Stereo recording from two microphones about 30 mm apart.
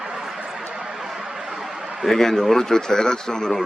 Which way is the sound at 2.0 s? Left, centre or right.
Centre.